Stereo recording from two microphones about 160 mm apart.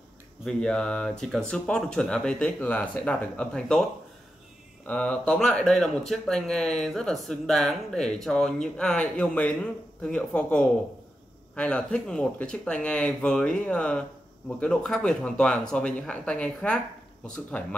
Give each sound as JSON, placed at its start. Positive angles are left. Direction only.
{"t": 0.5, "sound": "speech", "side_deg": 5}
{"t": 4.8, "sound": "speech", "side_deg": 10}